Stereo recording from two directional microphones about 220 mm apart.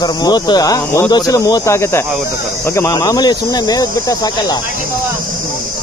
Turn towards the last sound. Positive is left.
turn(degrees=15)  # may be behind; listen again after turning